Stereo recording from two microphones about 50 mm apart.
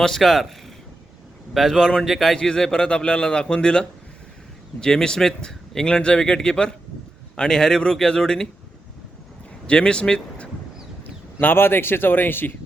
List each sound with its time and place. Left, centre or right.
0.0 s a man's voice: centre
1.5 s a man's voice: centre
9.6 s speech: centre
11.0 s a sound: left
11.5 s speech: left